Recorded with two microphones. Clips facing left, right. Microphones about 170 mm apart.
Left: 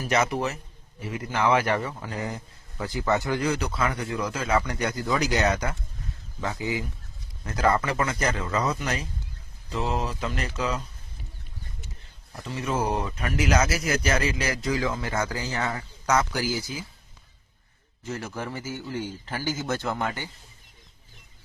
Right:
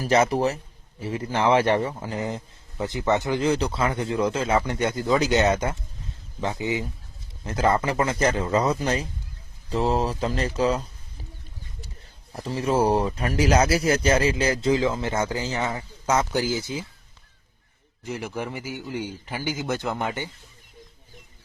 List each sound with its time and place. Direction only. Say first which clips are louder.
0.0 s a man's voice: right 5 dB; 35° right (ahead or behind)
12.4 s a man's voice: right 6 dB; 35° right (ahead or behind)
18.0 s a man's voice: right 2 dB; 15° right (ahead or behind)